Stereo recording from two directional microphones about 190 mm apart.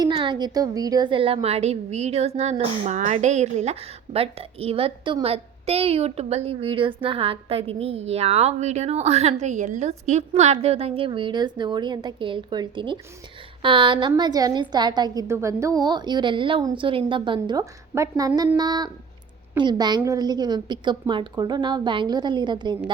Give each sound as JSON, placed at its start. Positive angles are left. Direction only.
{"t": 0.0, "sound": "a woman's voice", "side_deg": -25}